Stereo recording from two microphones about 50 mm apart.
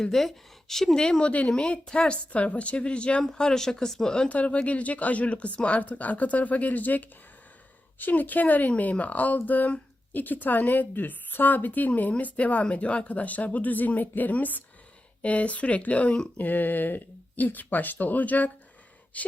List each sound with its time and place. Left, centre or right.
0.0 s speech: centre
4.3 s a woman's voice: left
16.4 s a woman's voice: left